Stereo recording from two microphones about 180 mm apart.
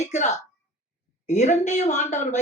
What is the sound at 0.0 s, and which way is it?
Speech, 40° left (ahead or behind).